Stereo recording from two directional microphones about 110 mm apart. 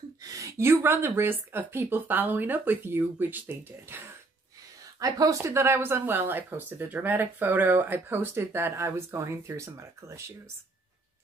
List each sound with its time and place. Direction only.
0.2 s speech: 30° right (ahead or behind)
5.0 s speech: 30° right (ahead or behind)